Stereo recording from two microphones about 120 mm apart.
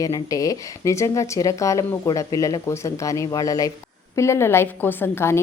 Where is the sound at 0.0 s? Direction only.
30° left (ahead or behind).